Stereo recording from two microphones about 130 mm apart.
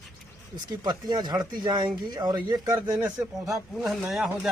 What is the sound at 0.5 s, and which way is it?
Speech, 35° right (ahead or behind).